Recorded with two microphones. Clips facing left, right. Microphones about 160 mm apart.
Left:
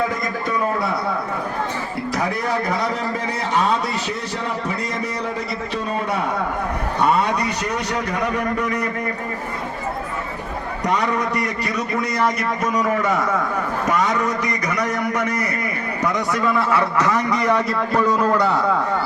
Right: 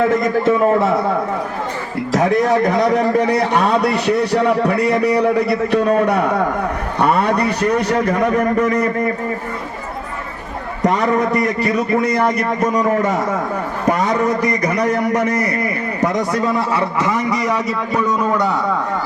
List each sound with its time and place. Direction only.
2.6 s a man's voice: 60° right (ahead or behind)
10.8 s a man's voice: 50° right (ahead or behind)
17.1 s a man's voice: 10° right (ahead or behind)